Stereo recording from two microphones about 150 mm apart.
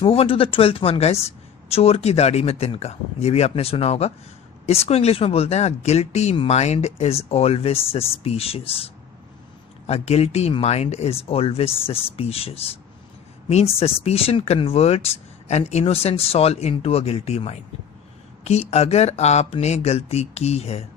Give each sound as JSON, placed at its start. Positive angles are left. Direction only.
{"t": 0.0, "sound": "speech", "side_deg": 40}